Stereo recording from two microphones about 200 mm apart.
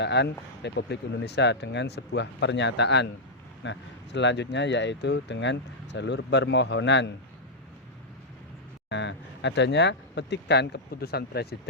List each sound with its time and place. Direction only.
0.0 s speech: 60° left (ahead or behind)
8.9 s speech: 60° left (ahead or behind)